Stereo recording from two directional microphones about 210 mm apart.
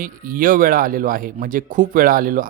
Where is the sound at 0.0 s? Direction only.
40° right (ahead or behind).